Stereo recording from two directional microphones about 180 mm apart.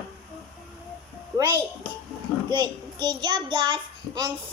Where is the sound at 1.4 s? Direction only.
20° right (ahead or behind).